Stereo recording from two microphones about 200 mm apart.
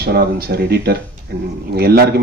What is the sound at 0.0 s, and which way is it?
Speech, 50° right (ahead or behind).